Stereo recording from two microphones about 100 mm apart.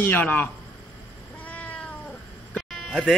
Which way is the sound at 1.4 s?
15° left (ahead or behind).